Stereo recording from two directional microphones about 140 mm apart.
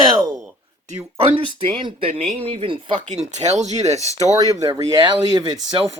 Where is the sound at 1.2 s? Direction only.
35° right (ahead or behind).